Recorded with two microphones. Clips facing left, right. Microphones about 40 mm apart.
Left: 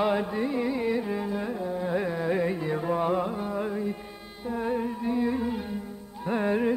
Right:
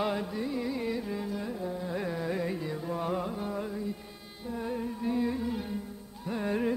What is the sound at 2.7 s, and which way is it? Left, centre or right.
Music, left.